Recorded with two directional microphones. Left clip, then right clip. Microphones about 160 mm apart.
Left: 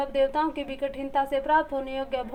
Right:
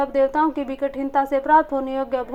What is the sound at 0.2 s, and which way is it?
Speech, 30° right (ahead or behind).